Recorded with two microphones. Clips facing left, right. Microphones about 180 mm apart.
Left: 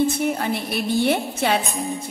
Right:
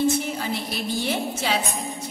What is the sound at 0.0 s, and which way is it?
A woman's voice, 55° left (ahead or behind).